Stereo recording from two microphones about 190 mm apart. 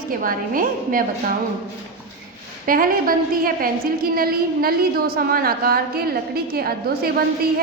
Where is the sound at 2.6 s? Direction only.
50° right (ahead or behind).